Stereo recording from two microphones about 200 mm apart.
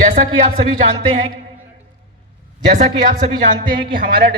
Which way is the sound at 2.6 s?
35° right (ahead or behind).